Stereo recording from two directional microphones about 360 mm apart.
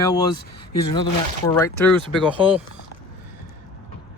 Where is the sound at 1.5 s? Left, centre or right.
Centre.